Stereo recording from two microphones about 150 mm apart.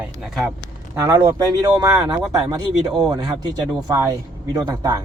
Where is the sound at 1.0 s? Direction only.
30° right (ahead or behind).